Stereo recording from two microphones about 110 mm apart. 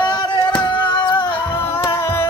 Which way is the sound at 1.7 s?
20° left (ahead or behind).